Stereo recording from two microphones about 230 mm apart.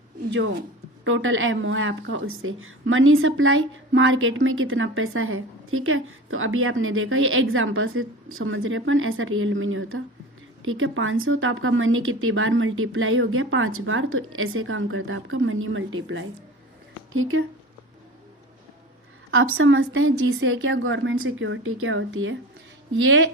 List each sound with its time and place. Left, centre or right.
0.3 s speech: right
19.3 s speech: right